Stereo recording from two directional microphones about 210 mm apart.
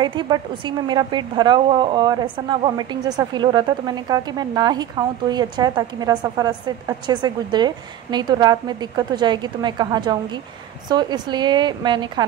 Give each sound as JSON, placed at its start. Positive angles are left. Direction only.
{"t": 0.0, "sound": "a woman's voice", "side_deg": -20}